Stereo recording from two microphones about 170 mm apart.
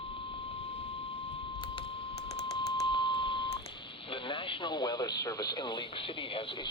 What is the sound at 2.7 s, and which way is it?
Beep, 30° left (ahead or behind).